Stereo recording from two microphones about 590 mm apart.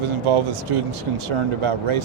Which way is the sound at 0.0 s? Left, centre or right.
Right.